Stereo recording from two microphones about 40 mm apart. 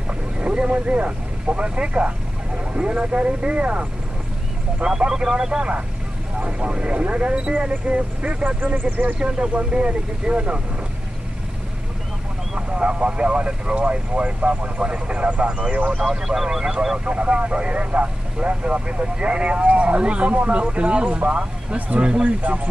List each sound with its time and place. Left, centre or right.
0.4 s speech: right
4.8 s speech: centre
6.6 s speech: right
8.5 s speech: right
9.2 s speech: right
12.5 s speech: right
16.0 s speech: centre
17.0 s speech: right